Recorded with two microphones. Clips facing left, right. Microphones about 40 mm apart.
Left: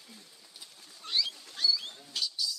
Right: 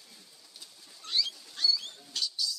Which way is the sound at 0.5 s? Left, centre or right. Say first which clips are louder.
Even; centre.